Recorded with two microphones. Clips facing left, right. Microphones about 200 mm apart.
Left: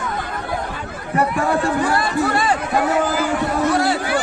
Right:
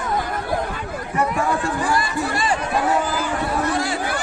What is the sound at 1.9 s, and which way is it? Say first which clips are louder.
Chatter: left 3 dB; 60° left (ahead or behind).